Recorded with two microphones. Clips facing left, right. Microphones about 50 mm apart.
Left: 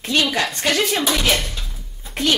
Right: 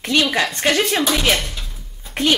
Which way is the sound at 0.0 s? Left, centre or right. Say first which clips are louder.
Right 2 dB; centre.